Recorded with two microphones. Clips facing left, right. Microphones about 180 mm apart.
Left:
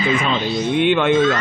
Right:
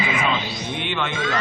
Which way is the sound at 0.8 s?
55° left (ahead or behind).